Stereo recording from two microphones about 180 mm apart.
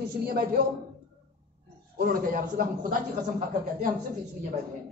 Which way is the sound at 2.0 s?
50° right (ahead or behind).